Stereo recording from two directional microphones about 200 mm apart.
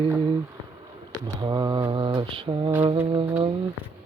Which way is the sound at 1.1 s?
20° right (ahead or behind).